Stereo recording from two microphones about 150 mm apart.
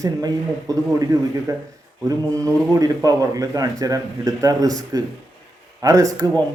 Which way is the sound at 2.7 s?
20° right (ahead or behind).